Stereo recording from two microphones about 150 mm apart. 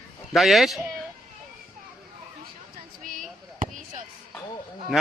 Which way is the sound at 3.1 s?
65° right (ahead or behind).